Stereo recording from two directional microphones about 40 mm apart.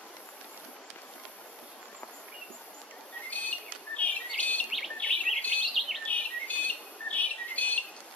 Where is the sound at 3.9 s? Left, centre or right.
Left.